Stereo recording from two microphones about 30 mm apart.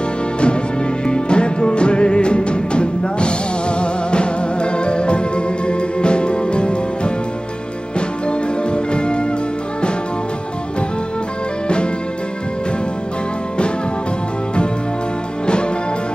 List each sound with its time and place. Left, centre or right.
1.0 s music: left
8.3 s music: left